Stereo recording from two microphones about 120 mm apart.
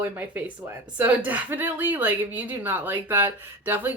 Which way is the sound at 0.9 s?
15° right (ahead or behind).